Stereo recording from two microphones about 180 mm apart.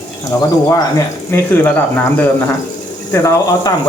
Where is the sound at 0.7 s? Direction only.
15° left (ahead or behind).